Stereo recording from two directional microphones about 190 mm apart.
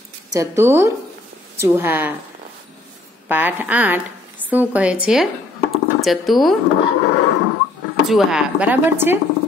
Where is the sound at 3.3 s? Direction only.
10° right (ahead or behind).